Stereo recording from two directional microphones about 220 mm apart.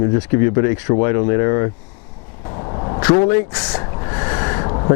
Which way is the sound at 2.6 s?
30° left (ahead or behind).